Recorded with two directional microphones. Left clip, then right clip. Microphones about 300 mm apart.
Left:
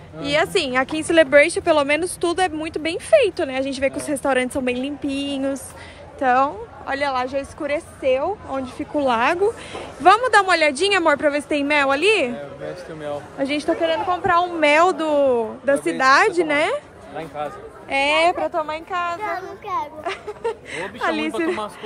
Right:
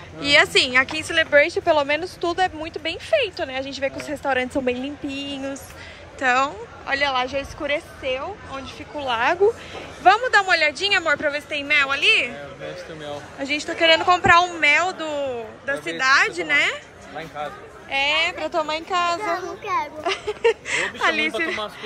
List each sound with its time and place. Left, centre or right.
0.2 s speech: centre
6.1 s speech: centre
8.5 s speech: left
13.4 s speech: centre
13.7 s speech: centre
14.6 s speech: centre
17.8 s speech: left
18.4 s speech: centre